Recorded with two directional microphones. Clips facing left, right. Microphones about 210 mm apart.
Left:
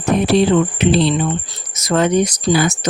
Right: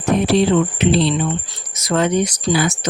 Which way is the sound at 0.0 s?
50° left (ahead or behind).